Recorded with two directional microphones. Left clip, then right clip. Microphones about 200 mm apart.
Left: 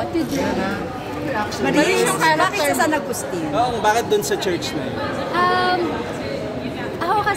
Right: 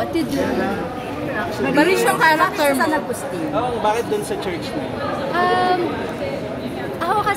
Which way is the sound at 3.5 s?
45° left (ahead or behind).